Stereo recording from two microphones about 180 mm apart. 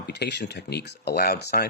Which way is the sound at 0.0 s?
70° left (ahead or behind).